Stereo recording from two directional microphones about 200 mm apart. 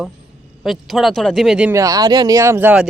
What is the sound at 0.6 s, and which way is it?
Speech, centre (ahead or behind).